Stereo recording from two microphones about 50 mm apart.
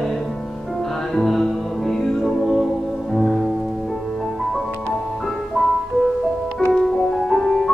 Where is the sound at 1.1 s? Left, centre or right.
Centre.